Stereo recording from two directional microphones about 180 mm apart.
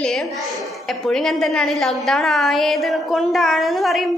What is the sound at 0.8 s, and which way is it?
A woman's voice, centre (ahead or behind).